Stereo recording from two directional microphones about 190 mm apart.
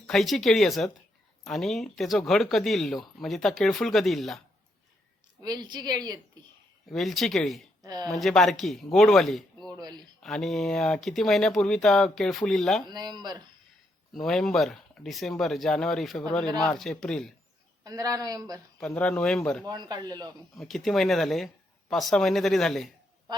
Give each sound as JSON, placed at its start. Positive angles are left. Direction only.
{"t": 0.1, "sound": "speech", "side_deg": 0}
{"t": 5.4, "sound": "a woman's voice", "side_deg": -20}
{"t": 6.9, "sound": "speech", "side_deg": 0}
{"t": 7.9, "sound": "a woman's voice", "side_deg": -20}
{"t": 8.2, "sound": "speech", "side_deg": 0}
{"t": 9.7, "sound": "a woman's voice", "side_deg": -20}
{"t": 10.2, "sound": "speech", "side_deg": 0}
{"t": 12.9, "sound": "a woman's voice", "side_deg": -20}
{"t": 14.1, "sound": "speech", "side_deg": 0}
{"t": 17.8, "sound": "a woman's voice", "side_deg": -20}
{"t": 18.8, "sound": "speech", "side_deg": 5}
{"t": 19.6, "sound": "a woman's voice", "side_deg": -20}
{"t": 20.6, "sound": "speech", "side_deg": 0}